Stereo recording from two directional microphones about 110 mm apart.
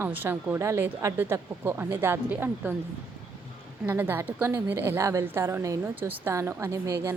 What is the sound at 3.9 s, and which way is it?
Speech, 20° right (ahead or behind).